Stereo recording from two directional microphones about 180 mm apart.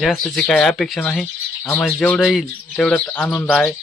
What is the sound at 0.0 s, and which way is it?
Speech, centre (ahead or behind).